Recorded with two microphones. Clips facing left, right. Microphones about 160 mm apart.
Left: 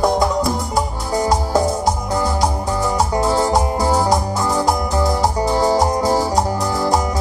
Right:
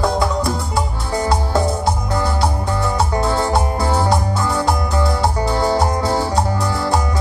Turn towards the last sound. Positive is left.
turn(degrees=15)  # may be behind; listen again after turning